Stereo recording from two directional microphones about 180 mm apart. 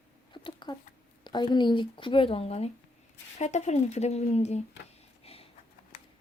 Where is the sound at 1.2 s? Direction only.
25° left (ahead or behind).